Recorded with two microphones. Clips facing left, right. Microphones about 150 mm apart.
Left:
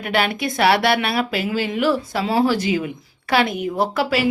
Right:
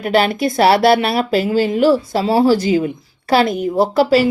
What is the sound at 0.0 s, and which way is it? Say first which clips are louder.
Speech: right 6 dB; 35° right (ahead or behind).